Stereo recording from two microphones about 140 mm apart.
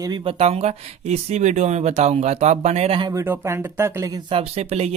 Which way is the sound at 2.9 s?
30° right (ahead or behind).